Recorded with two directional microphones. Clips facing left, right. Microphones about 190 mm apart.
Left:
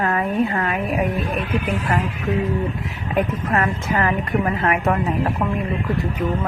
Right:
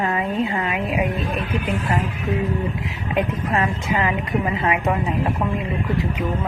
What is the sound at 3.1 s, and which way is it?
A woman's voice, 15° right (ahead or behind).